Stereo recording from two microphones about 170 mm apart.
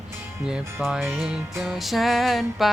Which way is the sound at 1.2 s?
Centre (ahead or behind).